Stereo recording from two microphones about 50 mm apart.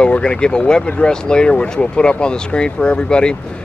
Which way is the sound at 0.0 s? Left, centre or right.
Left.